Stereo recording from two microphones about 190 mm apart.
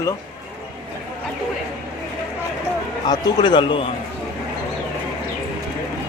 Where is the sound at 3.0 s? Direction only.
20° left (ahead or behind).